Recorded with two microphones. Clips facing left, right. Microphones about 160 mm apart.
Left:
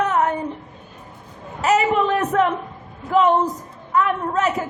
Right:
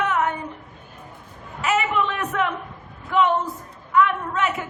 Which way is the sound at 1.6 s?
40° left (ahead or behind).